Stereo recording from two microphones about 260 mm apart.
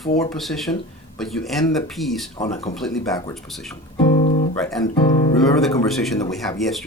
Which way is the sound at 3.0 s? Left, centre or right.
Centre.